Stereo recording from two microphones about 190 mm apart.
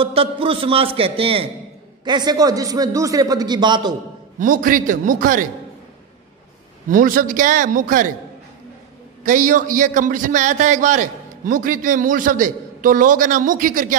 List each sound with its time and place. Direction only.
0.0 s a man's voice: 30° right (ahead or behind)
4.4 s a man's voice: 45° right (ahead or behind)
6.9 s a man's voice: 45° right (ahead or behind)
9.2 s a man's voice: 45° right (ahead or behind)